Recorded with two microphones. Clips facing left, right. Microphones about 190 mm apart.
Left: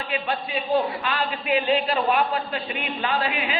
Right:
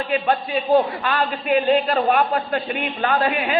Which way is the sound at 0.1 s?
45° right (ahead or behind).